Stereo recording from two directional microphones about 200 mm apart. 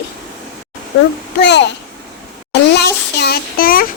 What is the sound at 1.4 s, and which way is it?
Speech, 60° left (ahead or behind).